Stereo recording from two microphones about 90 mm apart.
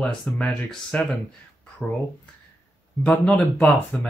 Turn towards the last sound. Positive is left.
turn(degrees=10)  # may be behind; listen again after turning